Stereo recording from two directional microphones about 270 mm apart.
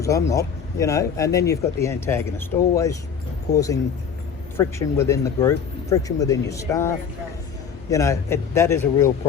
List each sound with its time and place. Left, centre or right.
0.0 s speech: centre